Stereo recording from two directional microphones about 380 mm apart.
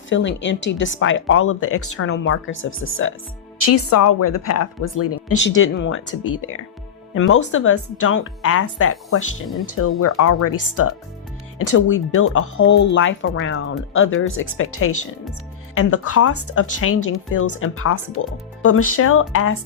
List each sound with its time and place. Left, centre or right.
0.1 s speech: left
9.7 s speech: left